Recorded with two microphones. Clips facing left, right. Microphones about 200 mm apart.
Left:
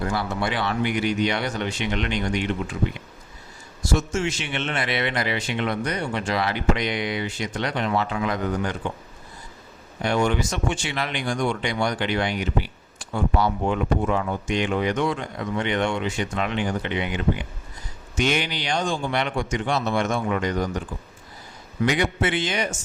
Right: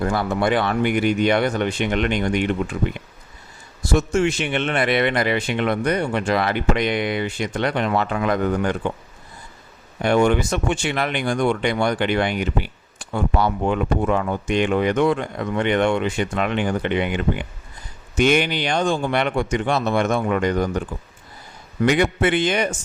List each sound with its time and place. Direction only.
0.0 s speech: 50° right (ahead or behind)
3.9 s speech: 60° right (ahead or behind)
10.0 s speech: 55° right (ahead or behind)
21.8 s speech: 55° right (ahead or behind)